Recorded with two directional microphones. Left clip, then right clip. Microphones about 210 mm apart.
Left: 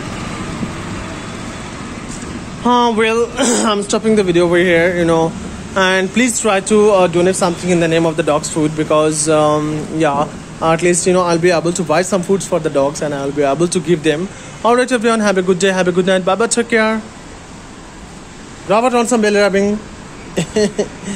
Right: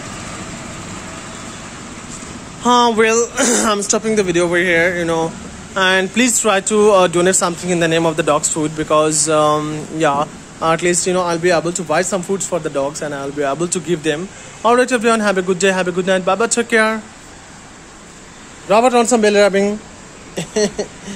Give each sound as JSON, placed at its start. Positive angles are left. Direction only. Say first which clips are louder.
{"t": 2.6, "sound": "speech", "louder": "even", "side_deg": -10}
{"t": 3.3, "sound": "speech", "louder": "left 1 dB", "side_deg": -20}
{"t": 7.6, "sound": "speech", "louder": "left 1 dB", "side_deg": -10}
{"t": 18.7, "sound": "speech", "louder": "right 1 dB", "side_deg": -10}
{"t": 20.3, "sound": "speech", "louder": "left 3 dB", "side_deg": 0}